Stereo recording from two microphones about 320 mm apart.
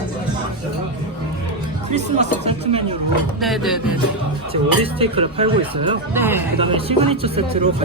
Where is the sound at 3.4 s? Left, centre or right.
Centre.